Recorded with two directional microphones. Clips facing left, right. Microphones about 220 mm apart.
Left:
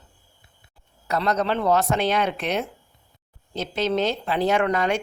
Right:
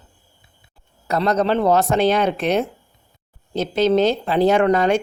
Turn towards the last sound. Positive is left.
turn(degrees=-35)  # may be behind; listen again after turning